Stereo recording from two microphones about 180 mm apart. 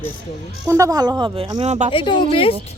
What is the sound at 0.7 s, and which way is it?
Speech, 20° right (ahead or behind).